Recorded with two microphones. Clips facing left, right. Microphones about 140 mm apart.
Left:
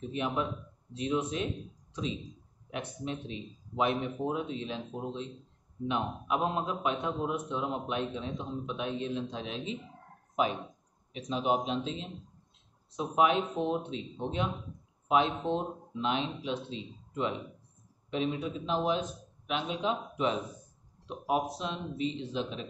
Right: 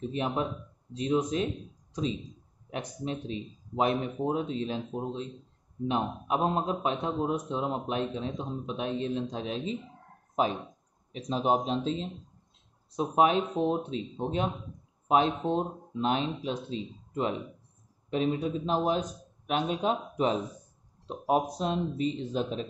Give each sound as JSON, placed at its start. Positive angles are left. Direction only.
{"t": 0.2, "sound": "a man's voice", "side_deg": -35}
{"t": 2.7, "sound": "a man's voice", "side_deg": -40}